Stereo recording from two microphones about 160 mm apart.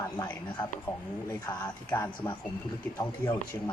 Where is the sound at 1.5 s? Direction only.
25° left (ahead or behind).